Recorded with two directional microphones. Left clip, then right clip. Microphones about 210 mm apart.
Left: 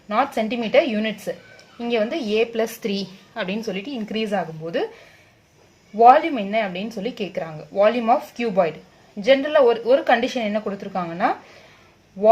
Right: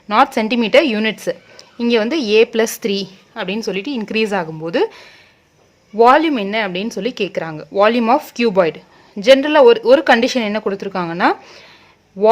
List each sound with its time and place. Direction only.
0.1 s a woman's voice: 50° right (ahead or behind)
6.0 s a woman's voice: 45° right (ahead or behind)